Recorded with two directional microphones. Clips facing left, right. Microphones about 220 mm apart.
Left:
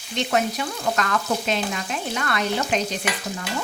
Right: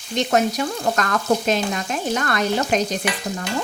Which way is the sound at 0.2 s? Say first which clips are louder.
Right 4 dB; 45° right (ahead or behind).